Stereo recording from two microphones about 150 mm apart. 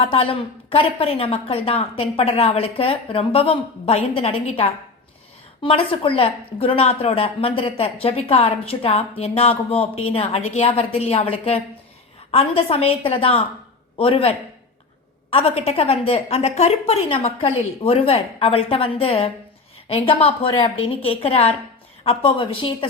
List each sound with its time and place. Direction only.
0.0 s a woman's voice: 40° left (ahead or behind)